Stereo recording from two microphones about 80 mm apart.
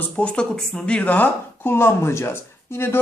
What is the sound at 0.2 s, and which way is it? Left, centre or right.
A woman's voice, centre.